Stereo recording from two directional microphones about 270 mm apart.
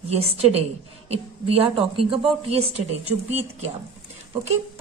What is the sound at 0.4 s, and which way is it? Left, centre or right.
A woman's voice, right.